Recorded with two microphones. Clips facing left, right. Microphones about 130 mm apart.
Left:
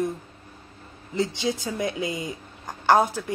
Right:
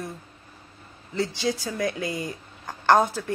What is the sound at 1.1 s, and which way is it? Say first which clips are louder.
Speech: left 1 dB; 20° left (ahead or behind).